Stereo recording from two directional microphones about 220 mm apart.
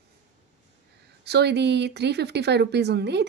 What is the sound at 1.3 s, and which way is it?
Speech, 50° right (ahead or behind).